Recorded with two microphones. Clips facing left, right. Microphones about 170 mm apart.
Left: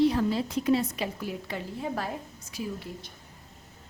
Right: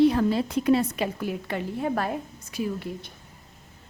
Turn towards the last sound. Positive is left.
turn(degrees=-60)  # may be behind; listen again after turning